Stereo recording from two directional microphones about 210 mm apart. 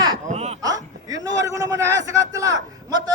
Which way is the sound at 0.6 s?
15° right (ahead or behind).